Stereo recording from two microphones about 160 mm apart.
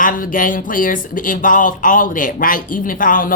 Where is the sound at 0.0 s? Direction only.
60° left (ahead or behind).